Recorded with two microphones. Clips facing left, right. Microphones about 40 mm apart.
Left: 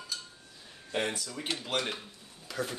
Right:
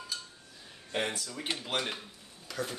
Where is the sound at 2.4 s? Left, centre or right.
Centre.